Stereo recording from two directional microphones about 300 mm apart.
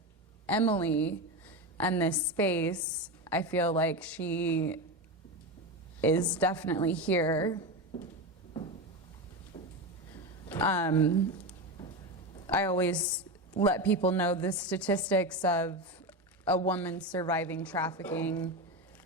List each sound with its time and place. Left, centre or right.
0.4 s a woman's voice: centre
6.0 s a woman's voice: centre
9.5 s a sound: centre
10.5 s a woman's voice: centre
12.5 s a woman's voice: centre